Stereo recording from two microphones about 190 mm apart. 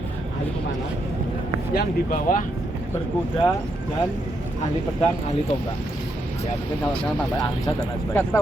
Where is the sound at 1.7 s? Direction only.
50° left (ahead or behind).